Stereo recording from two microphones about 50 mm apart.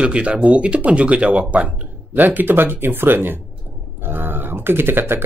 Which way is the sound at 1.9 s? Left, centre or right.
Right.